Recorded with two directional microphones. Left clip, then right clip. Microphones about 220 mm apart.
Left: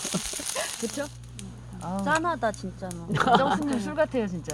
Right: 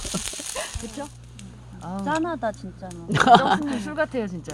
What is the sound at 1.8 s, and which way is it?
Speech, 5° right (ahead or behind).